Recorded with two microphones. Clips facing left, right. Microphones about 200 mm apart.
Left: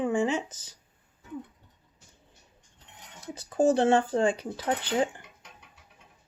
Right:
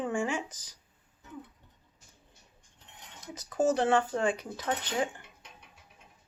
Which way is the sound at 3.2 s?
30° left (ahead or behind).